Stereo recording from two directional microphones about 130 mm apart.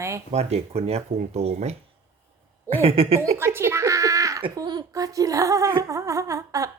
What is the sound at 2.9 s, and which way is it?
Speech, 45° right (ahead or behind).